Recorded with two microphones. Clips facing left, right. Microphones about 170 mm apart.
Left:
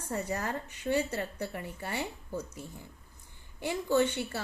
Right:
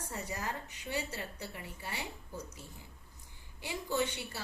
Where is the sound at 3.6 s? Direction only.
55° left (ahead or behind).